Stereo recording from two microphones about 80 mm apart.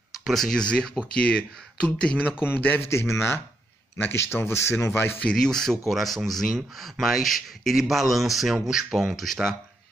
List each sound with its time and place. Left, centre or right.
0.2 s a man's voice: centre; by 2.9 s left
2.9 s speech: left
5.2 s speech: centre